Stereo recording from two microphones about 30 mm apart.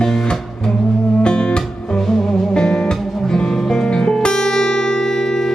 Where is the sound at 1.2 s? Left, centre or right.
Left; by 5.5 s centre.